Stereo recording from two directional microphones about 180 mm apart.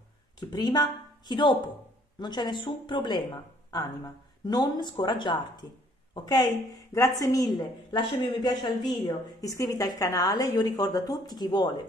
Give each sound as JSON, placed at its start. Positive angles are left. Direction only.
{"t": 0.4, "sound": "a woman's voice", "side_deg": 25}
{"t": 4.5, "sound": "a woman's voice", "side_deg": 25}